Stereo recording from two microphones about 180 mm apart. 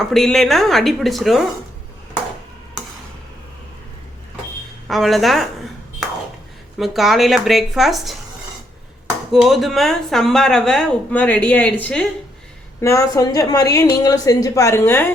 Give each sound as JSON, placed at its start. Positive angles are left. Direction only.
{"t": 0.0, "sound": "speech", "side_deg": 0}
{"t": 4.9, "sound": "a sound", "side_deg": 0}
{"t": 6.7, "sound": "speech", "side_deg": 0}
{"t": 9.3, "sound": "speech", "side_deg": 0}
{"t": 12.8, "sound": "a woman's voice", "side_deg": 15}